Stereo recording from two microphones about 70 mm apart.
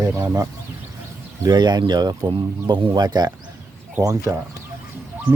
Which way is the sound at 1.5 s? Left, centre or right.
Right.